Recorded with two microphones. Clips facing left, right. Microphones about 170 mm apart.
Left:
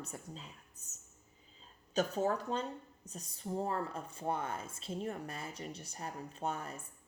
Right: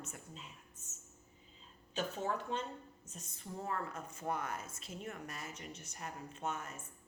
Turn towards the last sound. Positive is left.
turn(degrees=35)  # may be behind; listen again after turning